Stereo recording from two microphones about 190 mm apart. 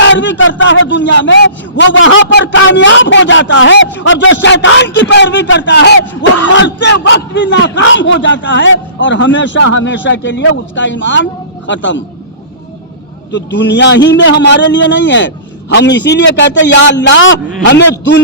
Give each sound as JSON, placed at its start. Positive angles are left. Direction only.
{"t": 0.1, "sound": "a man's voice", "side_deg": 70}
{"t": 13.3, "sound": "a man's voice", "side_deg": 70}